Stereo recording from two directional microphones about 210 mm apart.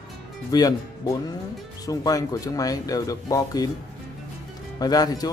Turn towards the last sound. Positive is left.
turn(degrees=20)  # may be behind; listen again after turning